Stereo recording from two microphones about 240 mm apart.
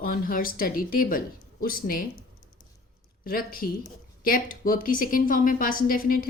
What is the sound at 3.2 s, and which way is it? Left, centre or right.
A woman's voice, left.